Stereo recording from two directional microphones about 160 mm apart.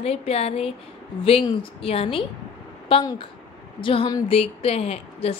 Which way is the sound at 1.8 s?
35° left (ahead or behind).